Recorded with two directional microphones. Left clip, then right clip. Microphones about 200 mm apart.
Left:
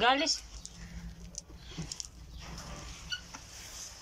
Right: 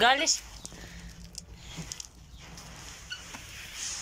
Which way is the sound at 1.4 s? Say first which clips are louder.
Even; 5° right (ahead or behind).